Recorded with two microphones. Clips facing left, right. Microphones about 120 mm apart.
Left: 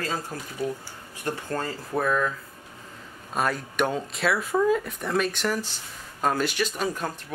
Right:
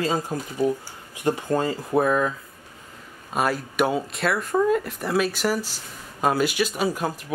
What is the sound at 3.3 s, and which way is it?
Speech, 5° right (ahead or behind).